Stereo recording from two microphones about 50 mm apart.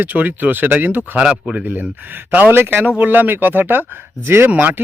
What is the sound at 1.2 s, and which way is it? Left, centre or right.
Speech, centre.